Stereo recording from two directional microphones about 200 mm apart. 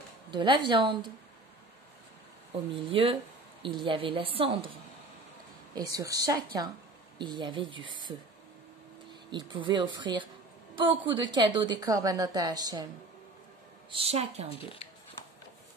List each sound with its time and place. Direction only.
0.3 s a woman's voice: 25° right (ahead or behind)
2.7 s a woman's voice: 25° right (ahead or behind)
5.8 s a woman's voice: 20° right (ahead or behind)
9.3 s a woman's voice: 25° right (ahead or behind)
13.8 s a woman's voice: 30° right (ahead or behind)
14.5 s speech: 30° left (ahead or behind)